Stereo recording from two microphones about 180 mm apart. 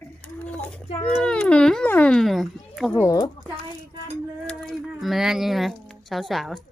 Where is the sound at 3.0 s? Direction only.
20° left (ahead or behind).